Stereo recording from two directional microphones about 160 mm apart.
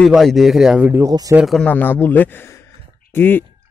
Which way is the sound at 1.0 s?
20° right (ahead or behind).